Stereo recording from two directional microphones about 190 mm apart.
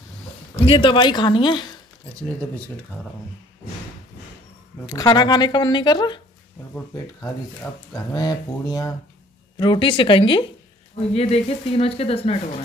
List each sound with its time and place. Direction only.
0.7 s speech: 25° left (ahead or behind)
4.8 s speech: 20° left (ahead or behind)